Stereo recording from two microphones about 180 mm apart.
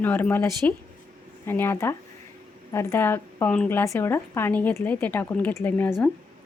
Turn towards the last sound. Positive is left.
turn(degrees=10)  # may be behind; listen again after turning